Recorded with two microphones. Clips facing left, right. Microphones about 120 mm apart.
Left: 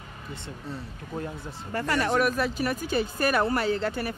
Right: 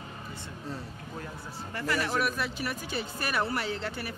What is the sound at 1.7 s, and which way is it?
Speech, 45° left (ahead or behind).